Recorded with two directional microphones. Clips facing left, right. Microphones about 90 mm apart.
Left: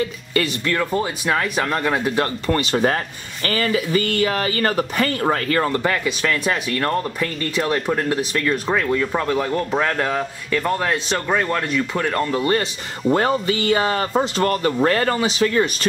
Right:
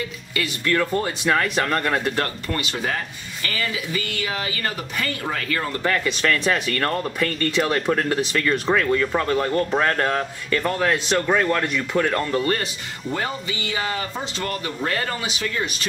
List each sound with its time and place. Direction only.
0.9 s speech: 10° left (ahead or behind)
2.4 s speech: 35° left (ahead or behind)
5.8 s speech: 10° left (ahead or behind)
13.1 s speech: 50° left (ahead or behind)